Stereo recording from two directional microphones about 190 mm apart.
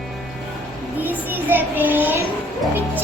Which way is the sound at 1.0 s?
10° right (ahead or behind).